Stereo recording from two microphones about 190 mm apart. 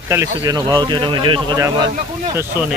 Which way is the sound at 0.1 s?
15° right (ahead or behind).